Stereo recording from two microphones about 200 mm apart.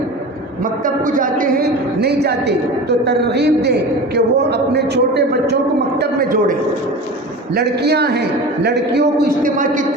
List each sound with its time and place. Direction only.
0.6 s a woman's voice: 40° right (ahead or behind)